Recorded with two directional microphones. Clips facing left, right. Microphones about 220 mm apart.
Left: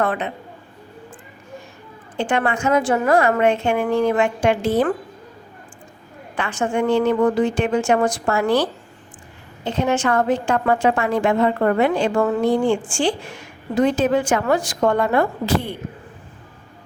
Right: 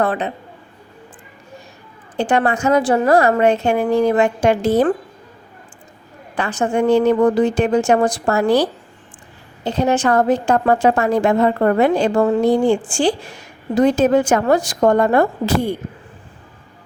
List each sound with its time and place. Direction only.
0.0 s a woman's voice: 35° right (ahead or behind)
2.1 s a woman's voice: 40° right (ahead or behind)
6.3 s a woman's voice: 40° right (ahead or behind)